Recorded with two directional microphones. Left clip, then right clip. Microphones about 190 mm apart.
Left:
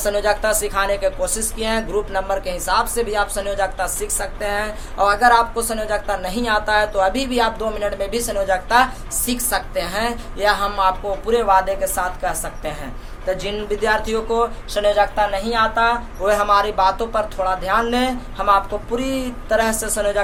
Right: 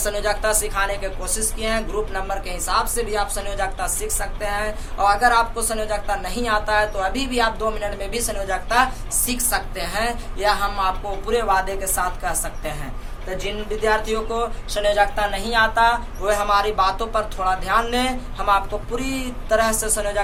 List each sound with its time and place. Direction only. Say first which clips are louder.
0.0 s a woman's voice: left 4 dB; 30° left (ahead or behind)